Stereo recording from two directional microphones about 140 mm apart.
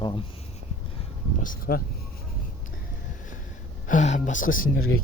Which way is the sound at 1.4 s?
80° left.